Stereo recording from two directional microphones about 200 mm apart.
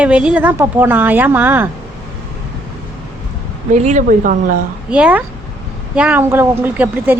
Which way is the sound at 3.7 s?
35° right (ahead or behind).